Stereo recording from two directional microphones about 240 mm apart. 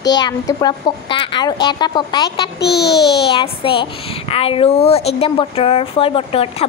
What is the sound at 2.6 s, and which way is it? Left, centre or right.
Speech, left.